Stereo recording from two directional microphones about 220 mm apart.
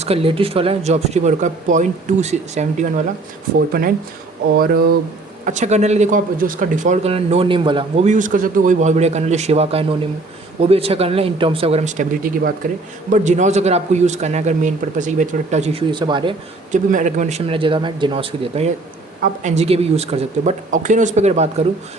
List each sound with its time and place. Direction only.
0.0 s speech: 25° right (ahead or behind); by 4.9 s 40° right (ahead or behind)
5.5 s speech: 30° right (ahead or behind)
16.7 s speech: 35° right (ahead or behind)